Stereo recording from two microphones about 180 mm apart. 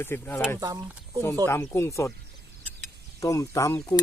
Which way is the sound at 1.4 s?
15° left (ahead or behind).